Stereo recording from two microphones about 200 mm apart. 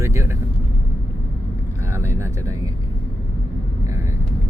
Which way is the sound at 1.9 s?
15° right (ahead or behind).